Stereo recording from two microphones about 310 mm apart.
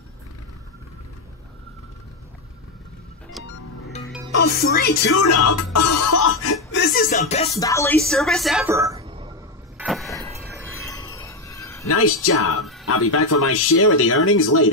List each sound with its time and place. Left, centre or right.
3.4 s music: centre
4.4 s speech: left
5.1 s music: left
7.5 s speech: centre
9.8 s a sound: centre
11.9 s speech: left